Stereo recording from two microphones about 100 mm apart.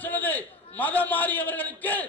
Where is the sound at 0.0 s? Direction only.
20° left (ahead or behind).